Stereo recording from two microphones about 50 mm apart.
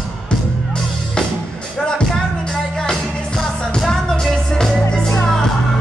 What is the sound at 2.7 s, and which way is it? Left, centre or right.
Music, centre.